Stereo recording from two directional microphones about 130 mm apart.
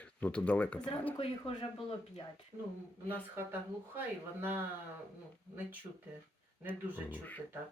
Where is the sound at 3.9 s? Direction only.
15° right (ahead or behind).